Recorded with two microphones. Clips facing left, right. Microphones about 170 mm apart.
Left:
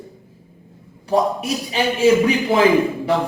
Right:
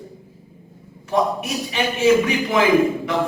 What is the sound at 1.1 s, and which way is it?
Speech, 35° left (ahead or behind).